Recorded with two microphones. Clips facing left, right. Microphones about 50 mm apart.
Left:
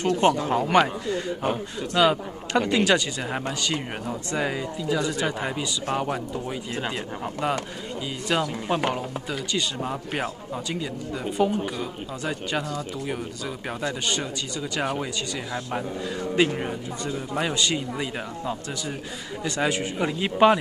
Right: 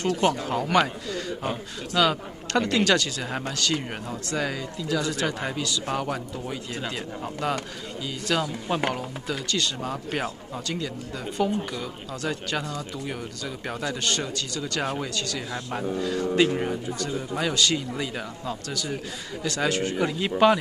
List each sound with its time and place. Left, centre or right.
0.4 s a man's voice: left